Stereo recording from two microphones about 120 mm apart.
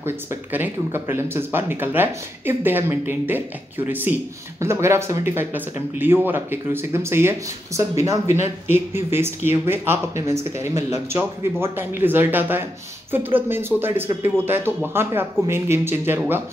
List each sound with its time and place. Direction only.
0.0 s speech: 20° right (ahead or behind)